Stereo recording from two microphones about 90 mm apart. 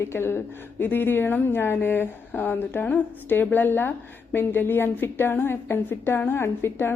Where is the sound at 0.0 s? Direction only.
25° left (ahead or behind).